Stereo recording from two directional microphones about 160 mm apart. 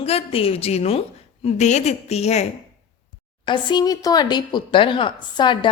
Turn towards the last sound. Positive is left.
turn(degrees=30)  # may be behind; listen again after turning